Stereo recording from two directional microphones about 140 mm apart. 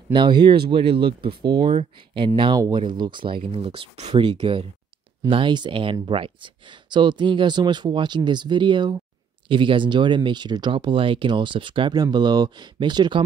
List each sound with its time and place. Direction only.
0.1 s speech: 35° right (ahead or behind)